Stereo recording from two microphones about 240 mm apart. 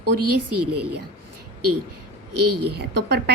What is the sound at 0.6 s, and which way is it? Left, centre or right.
Speech, right.